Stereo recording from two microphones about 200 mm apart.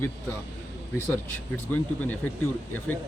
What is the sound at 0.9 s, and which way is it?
Speech, 10° left (ahead or behind).